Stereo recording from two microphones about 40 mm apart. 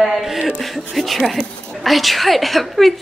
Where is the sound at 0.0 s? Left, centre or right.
Centre.